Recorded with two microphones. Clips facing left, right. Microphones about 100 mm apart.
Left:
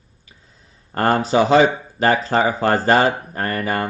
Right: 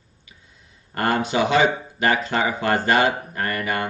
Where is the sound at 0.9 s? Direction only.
35° left (ahead or behind).